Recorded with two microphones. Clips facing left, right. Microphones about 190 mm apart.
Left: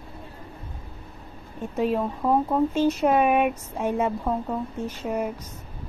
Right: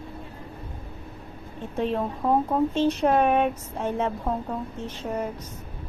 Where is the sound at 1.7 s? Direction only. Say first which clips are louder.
Left 2 dB; 5° left (ahead or behind).